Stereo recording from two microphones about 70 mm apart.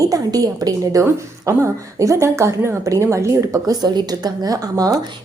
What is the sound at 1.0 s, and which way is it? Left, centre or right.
A woman's voice, right.